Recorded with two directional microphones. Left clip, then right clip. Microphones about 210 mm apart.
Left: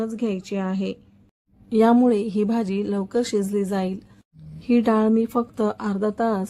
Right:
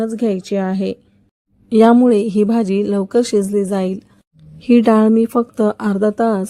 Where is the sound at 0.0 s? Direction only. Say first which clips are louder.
Right 8 dB; 25° right (ahead or behind).